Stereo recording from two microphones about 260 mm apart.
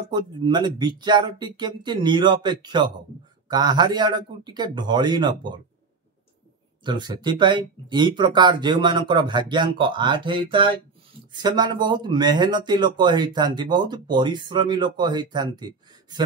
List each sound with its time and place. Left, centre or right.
0.1 s speech: centre
6.8 s speech: centre